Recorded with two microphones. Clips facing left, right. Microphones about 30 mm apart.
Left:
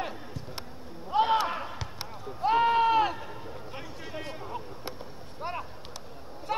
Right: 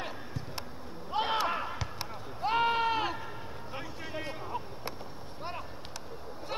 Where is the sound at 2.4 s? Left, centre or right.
Centre.